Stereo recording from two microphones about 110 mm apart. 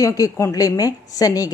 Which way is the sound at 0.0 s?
30° left (ahead or behind).